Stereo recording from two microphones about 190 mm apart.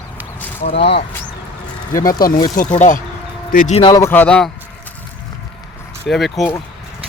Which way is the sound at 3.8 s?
20° left (ahead or behind).